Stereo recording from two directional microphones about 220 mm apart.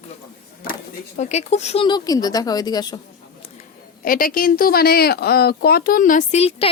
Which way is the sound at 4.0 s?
40° left (ahead or behind).